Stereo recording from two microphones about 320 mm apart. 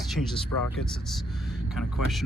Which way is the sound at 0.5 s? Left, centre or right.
Left.